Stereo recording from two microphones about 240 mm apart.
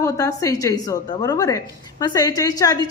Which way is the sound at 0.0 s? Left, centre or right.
Centre.